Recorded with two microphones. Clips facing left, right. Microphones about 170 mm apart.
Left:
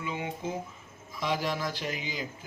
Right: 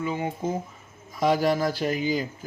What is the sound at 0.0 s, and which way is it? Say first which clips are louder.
Speech: right 6 dB; 45° right (ahead or behind).